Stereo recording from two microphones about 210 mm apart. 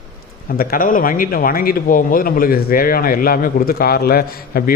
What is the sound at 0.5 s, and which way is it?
A man's voice, 45° left (ahead or behind).